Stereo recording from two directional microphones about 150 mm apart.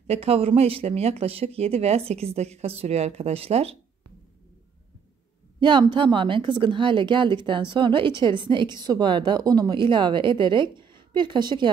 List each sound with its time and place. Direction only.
0.0 s speech: 45° right (ahead or behind)
5.6 s a woman's voice: 30° right (ahead or behind)